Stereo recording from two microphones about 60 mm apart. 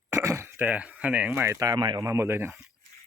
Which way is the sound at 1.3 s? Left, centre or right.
Right.